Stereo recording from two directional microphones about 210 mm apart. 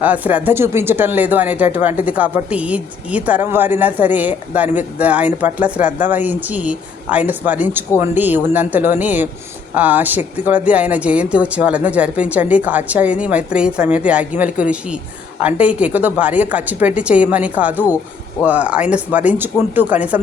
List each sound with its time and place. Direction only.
0.0 s speech: 5° right (ahead or behind)